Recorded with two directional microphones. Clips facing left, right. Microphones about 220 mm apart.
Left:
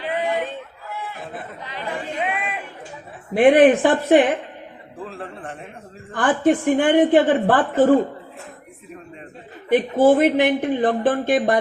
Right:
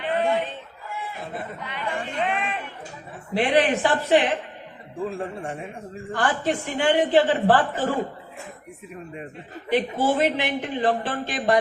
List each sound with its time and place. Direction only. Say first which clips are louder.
1.2 s chatter: even; centre (ahead or behind)
1.6 s speech: left 3 dB; 40° left (ahead or behind)
2.1 s a sound: even; 5° left (ahead or behind)
3.3 s speech: left 8 dB; 50° left (ahead or behind)
5.0 s a man's voice: right 4 dB; 10° right (ahead or behind)
6.1 s speech: left 7 dB; 50° left (ahead or behind)
9.6 s speech: left 7 dB; 50° left (ahead or behind)